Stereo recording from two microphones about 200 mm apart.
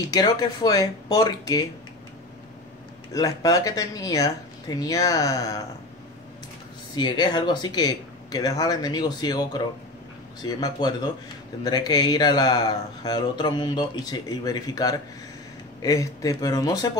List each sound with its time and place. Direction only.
0.0 s speech: 20° left (ahead or behind)
3.1 s speech: 15° left (ahead or behind)
7.0 s speech: 20° left (ahead or behind)